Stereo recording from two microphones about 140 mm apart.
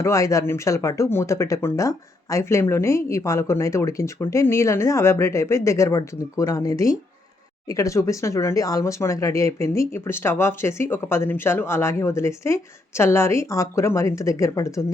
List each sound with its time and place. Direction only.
0.0 s speech: 25° left (ahead or behind)